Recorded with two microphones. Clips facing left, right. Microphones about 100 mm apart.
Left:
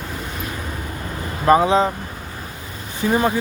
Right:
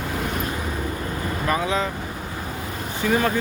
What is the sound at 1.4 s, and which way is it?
Speech, 35° left (ahead or behind).